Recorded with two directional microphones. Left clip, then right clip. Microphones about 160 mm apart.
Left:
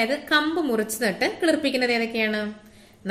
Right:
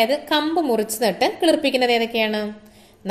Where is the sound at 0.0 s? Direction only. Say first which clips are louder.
Right 3 dB; 20° right (ahead or behind).